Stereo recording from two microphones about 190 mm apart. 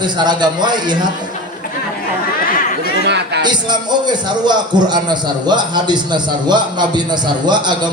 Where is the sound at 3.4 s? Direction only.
25° right (ahead or behind).